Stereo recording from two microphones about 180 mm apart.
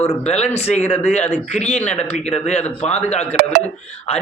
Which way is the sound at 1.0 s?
40° left (ahead or behind).